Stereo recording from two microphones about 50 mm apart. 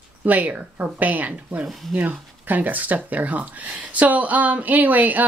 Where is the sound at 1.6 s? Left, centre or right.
Centre.